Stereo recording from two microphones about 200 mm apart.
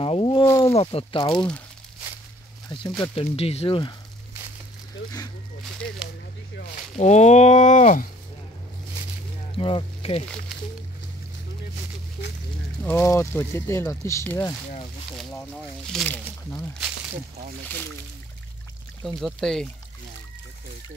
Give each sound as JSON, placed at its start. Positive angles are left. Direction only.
{"t": 0.0, "sound": "speech", "side_deg": 25}
{"t": 1.3, "sound": "speech", "side_deg": 5}
{"t": 3.0, "sound": "speech", "side_deg": 30}
{"t": 5.0, "sound": "speech", "side_deg": 90}
{"t": 7.0, "sound": "speech", "side_deg": 35}
{"t": 9.5, "sound": "speech", "side_deg": 25}
{"t": 12.8, "sound": "speech", "side_deg": 15}
{"t": 19.0, "sound": "speech", "side_deg": 0}